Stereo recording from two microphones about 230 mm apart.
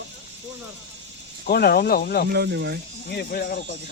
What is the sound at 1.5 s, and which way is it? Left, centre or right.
Speech, left.